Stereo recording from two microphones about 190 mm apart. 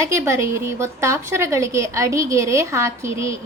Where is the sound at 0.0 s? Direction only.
15° right (ahead or behind).